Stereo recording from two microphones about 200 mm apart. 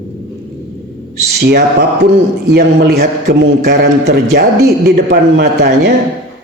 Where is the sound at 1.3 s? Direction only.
50° right (ahead or behind).